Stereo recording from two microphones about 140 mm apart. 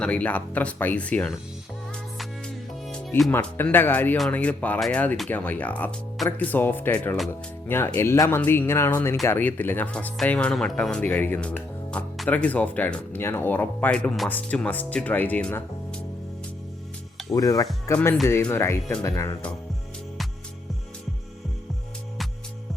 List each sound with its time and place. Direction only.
0.0 s speech: 10° left (ahead or behind)
3.3 s speech: 15° left (ahead or behind)
17.3 s speech: 25° left (ahead or behind)